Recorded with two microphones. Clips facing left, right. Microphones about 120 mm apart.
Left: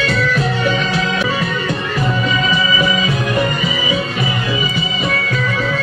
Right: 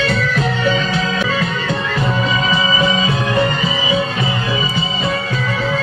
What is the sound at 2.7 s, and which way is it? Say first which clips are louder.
Music: right 1 dB; 25° right (ahead or behind).